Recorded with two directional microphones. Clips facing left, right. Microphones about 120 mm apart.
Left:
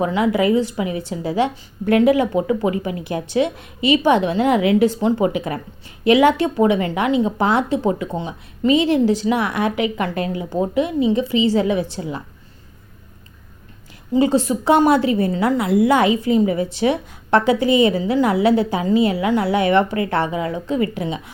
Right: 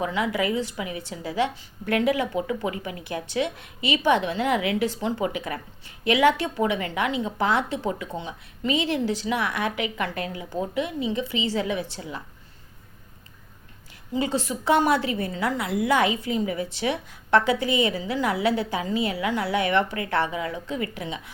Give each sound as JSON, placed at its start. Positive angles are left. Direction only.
{"t": 0.0, "sound": "a woman's voice", "side_deg": 30}
{"t": 14.1, "sound": "a woman's voice", "side_deg": 35}